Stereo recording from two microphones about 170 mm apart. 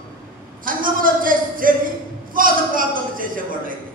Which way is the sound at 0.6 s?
55° right (ahead or behind).